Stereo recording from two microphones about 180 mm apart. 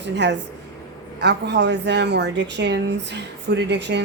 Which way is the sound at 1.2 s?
70° right (ahead or behind).